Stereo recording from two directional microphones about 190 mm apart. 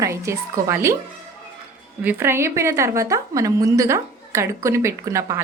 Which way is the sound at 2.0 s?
10° right (ahead or behind).